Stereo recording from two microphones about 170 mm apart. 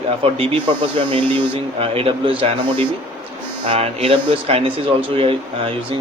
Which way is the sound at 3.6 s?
35° right (ahead or behind).